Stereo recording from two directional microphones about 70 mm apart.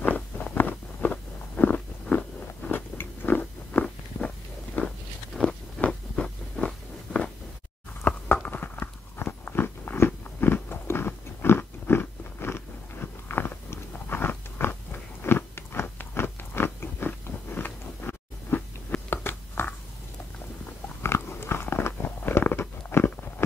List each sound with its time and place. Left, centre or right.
0.0 s a sound: left
2.0 s biting: centre
2.7 s biting: left
4.8 s walk: left
5.3 s biting: centre
5.8 s a sound: centre
8.3 s biting: left
21.0 s biting: left